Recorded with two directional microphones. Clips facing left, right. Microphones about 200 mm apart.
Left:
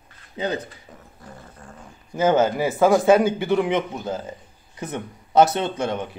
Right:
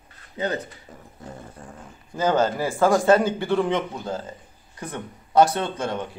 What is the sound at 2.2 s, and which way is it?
A man's voice, 20° left (ahead or behind).